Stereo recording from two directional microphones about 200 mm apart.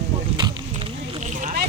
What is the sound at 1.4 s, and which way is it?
Speech, 35° right (ahead or behind).